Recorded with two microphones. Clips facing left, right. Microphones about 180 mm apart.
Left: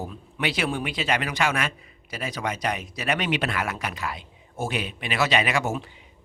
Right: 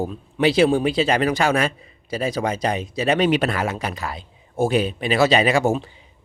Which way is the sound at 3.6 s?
30° right (ahead or behind).